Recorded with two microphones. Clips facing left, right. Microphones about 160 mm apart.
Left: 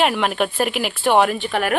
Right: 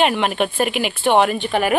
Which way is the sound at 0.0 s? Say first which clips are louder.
Right 1 dB; centre (ahead or behind).